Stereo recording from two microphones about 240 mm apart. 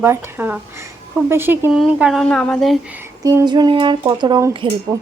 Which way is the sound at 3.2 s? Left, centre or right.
Centre.